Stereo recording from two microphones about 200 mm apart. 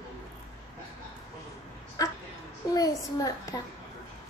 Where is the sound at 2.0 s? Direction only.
15° left (ahead or behind).